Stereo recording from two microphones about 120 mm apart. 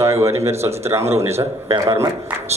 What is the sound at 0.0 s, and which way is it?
Speech, 25° right (ahead or behind).